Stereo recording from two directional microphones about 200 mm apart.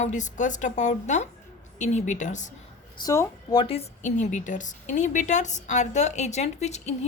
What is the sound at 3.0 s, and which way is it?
A woman's voice, 20° left (ahead or behind).